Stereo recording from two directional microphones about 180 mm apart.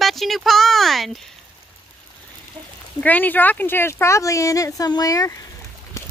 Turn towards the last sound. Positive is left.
turn(degrees=20)  # may be behind; listen again after turning